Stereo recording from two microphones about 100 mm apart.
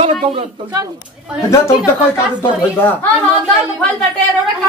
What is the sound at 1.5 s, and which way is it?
Speech, 30° left (ahead or behind).